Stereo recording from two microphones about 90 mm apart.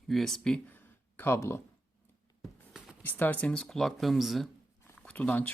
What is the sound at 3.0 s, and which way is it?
Speech, 20° left (ahead or behind).